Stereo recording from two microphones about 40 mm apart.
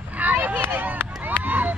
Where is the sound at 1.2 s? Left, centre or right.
Right.